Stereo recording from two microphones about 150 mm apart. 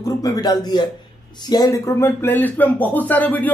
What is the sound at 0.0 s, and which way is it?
A man's voice, 25° left (ahead or behind).